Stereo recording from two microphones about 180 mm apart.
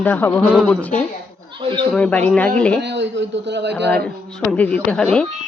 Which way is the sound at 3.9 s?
5° left (ahead or behind).